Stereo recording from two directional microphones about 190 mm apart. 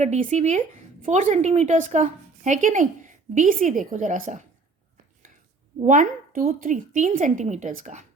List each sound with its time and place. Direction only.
0.0 s a woman's voice: 40° right (ahead or behind)
5.8 s a woman's voice: 45° right (ahead or behind)